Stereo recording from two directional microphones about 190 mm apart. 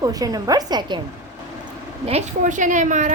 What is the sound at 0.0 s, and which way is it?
Speech, 20° right (ahead or behind).